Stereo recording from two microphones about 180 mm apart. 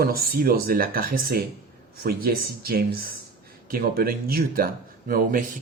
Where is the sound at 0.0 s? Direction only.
55° right (ahead or behind).